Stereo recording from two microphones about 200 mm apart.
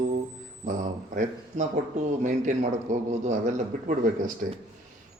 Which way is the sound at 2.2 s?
40° right (ahead or behind).